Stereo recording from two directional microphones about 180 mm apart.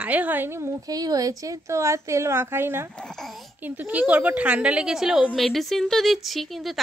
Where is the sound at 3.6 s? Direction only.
10° right (ahead or behind).